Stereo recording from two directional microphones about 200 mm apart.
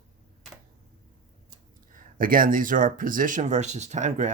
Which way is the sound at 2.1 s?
45° right (ahead or behind).